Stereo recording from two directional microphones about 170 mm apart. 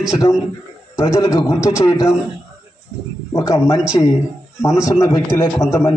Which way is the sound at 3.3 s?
20° left (ahead or behind).